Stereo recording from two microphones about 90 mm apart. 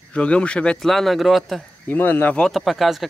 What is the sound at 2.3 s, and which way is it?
Speech, centre (ahead or behind).